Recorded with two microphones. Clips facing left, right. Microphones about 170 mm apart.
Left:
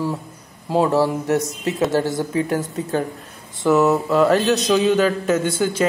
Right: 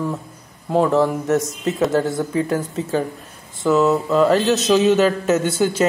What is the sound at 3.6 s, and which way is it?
Speech, 10° left (ahead or behind).